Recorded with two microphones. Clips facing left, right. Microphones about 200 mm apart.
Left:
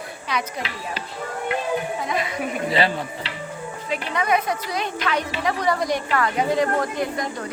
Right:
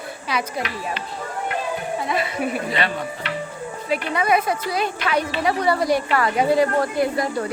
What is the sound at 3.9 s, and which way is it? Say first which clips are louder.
A woman's voice: right 2 dB; 10° right (ahead or behind).